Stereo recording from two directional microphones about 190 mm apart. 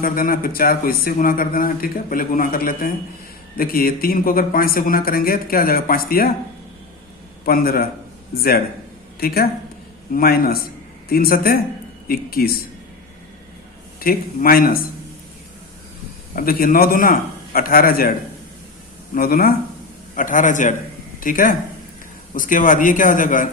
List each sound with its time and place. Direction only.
0.0 s speech: 50° left (ahead or behind)
7.4 s speech: 50° left (ahead or behind)
14.0 s speech: 50° left (ahead or behind)
16.3 s speech: 50° left (ahead or behind)
19.1 s speech: 50° left (ahead or behind)